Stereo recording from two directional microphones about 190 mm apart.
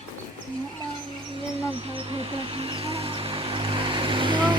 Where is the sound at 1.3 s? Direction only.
30° right (ahead or behind).